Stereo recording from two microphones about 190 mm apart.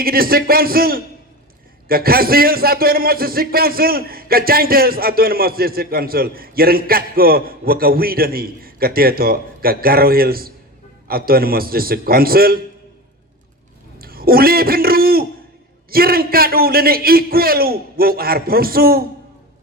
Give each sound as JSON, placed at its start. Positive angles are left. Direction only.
{"t": 0.0, "sound": "a man's voice", "side_deg": -50}
{"t": 14.0, "sound": "a man's voice", "side_deg": -50}